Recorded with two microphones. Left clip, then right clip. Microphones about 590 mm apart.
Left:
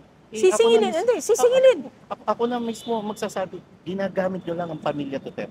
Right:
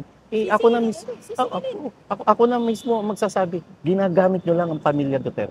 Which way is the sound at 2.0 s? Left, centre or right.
Right.